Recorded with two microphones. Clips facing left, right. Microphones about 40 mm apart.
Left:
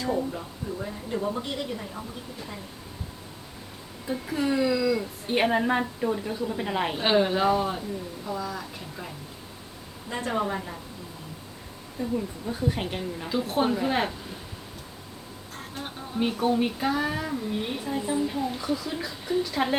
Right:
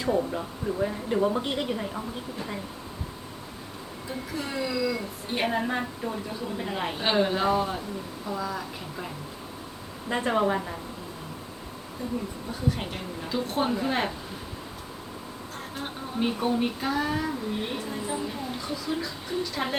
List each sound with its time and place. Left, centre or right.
0.3 s a woman's voice: right
4.1 s a woman's voice: centre
5.3 s a woman's voice: centre
8.3 s insect: centre
10.1 s a woman's voice: right
12.5 s a woman's voice: centre
13.2 s insect: centre
15.7 s insect: centre
17.9 s a woman's voice: centre
18.9 s insect: centre
19.4 s a woman's voice: centre